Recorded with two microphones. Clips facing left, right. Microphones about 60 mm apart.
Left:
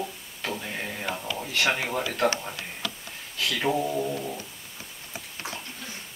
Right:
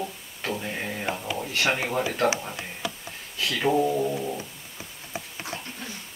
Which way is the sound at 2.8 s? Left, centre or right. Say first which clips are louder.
Right 2 dB; centre.